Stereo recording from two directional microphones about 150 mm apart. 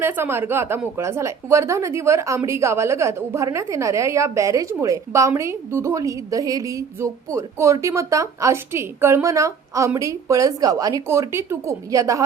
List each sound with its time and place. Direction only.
0.0 s a woman's voice: 15° right (ahead or behind)